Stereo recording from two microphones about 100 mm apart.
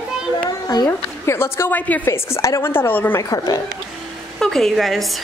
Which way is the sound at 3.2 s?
35° left (ahead or behind).